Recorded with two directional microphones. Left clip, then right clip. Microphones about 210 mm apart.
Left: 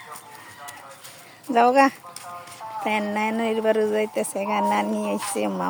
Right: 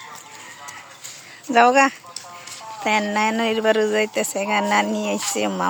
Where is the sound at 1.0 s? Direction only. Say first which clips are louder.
Right 5 dB; centre (ahead or behind).